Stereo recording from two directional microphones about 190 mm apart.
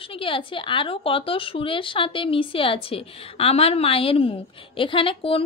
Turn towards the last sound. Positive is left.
turn(degrees=30)  # may be behind; listen again after turning